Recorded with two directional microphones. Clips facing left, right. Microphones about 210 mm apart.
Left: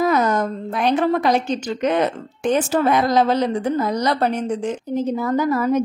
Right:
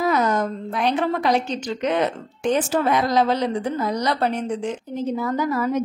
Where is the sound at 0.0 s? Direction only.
45° left (ahead or behind).